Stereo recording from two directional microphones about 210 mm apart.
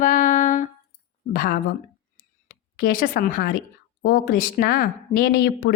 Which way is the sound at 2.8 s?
40° left (ahead or behind).